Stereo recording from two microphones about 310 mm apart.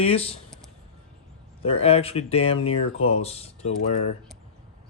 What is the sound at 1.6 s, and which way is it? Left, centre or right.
Speech, centre.